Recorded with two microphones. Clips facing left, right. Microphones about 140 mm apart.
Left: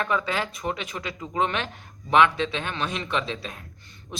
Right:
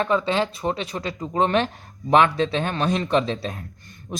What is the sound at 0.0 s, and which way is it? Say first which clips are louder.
Speech: right 5 dB; 30° right (ahead or behind).